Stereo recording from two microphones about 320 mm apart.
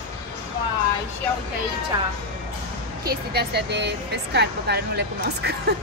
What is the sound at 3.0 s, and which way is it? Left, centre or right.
Speech, right.